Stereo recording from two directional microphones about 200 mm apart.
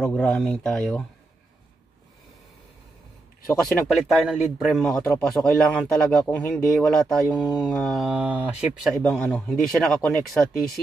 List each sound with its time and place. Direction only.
0.1 s speech: 5° left (ahead or behind)
3.6 s speech: centre (ahead or behind)